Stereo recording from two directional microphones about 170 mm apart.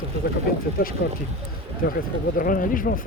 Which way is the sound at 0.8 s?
60° left (ahead or behind).